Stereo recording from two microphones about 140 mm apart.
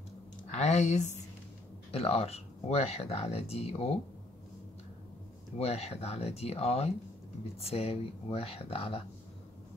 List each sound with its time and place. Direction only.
0.5 s speech: 55° left (ahead or behind)
5.6 s speech: 50° left (ahead or behind)